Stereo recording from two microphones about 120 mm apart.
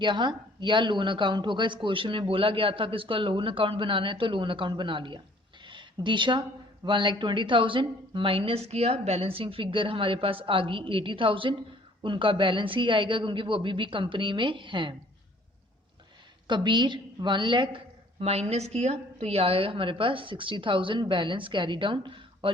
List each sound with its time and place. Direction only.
0.0 s a woman's voice: 40° right (ahead or behind)
5.6 s a sound: 40° right (ahead or behind)
6.8 s a woman's voice: 40° right (ahead or behind)
16.5 s a woman's voice: 40° right (ahead or behind)